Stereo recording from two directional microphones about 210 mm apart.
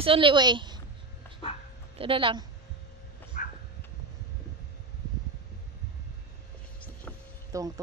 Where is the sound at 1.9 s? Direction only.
25° right (ahead or behind).